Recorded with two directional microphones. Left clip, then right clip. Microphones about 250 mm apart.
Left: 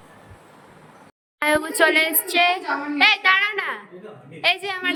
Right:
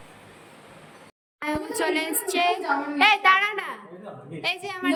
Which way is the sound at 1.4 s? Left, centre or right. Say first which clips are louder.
Left 8 dB; centre.